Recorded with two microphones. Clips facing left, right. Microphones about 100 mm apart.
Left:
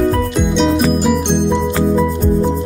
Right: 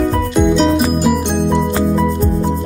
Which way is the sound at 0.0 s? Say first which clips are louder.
Right 1 dB; centre (ahead or behind).